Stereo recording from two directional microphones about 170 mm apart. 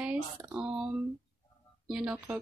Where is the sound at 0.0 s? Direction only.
10° right (ahead or behind).